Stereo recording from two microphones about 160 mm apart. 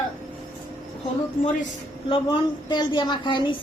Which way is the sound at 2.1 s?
30° left (ahead or behind).